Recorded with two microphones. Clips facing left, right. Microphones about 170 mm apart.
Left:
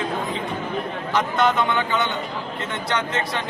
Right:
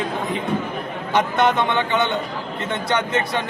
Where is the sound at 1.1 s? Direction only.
25° right (ahead or behind).